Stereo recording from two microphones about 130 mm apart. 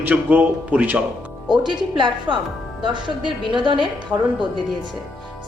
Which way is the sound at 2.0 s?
35° right (ahead or behind).